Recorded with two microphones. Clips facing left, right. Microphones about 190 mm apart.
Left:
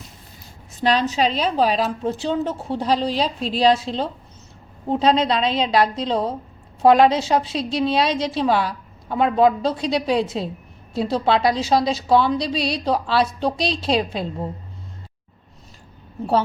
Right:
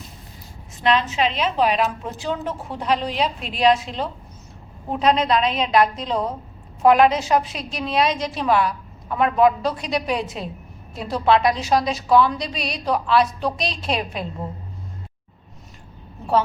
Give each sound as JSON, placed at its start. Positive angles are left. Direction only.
{"t": 0.8, "sound": "a woman's voice", "side_deg": 35}